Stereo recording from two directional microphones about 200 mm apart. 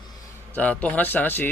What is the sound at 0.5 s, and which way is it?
Speech, 5° left (ahead or behind).